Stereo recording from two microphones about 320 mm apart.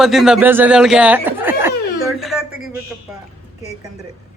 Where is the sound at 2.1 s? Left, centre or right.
Centre.